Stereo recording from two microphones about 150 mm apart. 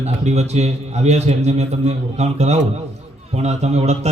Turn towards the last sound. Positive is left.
turn(degrees=-45)  # may be behind; listen again after turning